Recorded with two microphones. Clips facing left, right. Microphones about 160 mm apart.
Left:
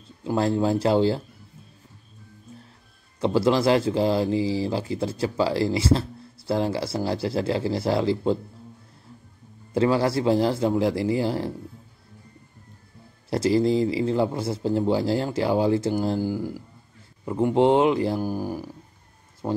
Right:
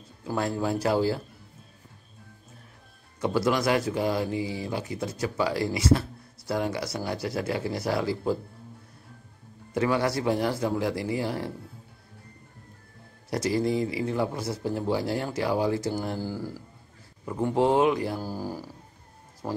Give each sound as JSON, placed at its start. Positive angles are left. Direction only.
{"t": 0.2, "sound": "speech", "side_deg": 25}
{"t": 3.2, "sound": "speech", "side_deg": 25}
{"t": 9.8, "sound": "speech", "side_deg": 30}
{"t": 13.3, "sound": "speech", "side_deg": 25}